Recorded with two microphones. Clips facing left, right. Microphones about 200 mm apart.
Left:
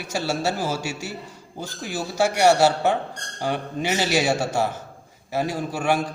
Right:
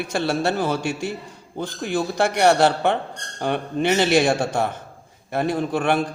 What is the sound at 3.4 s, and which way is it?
Speech, 60° right (ahead or behind).